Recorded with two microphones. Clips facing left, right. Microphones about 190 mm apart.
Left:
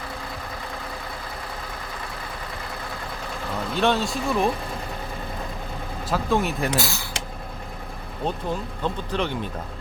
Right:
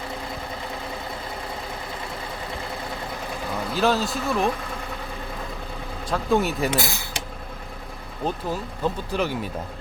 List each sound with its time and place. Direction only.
3.8 s speech: centre (ahead or behind)
6.1 s speech: centre (ahead or behind)
6.7 s speech: 15° right (ahead or behind)
8.2 s speech: 5° right (ahead or behind)